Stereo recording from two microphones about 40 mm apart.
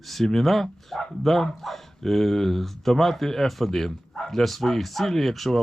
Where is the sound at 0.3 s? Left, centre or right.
Centre.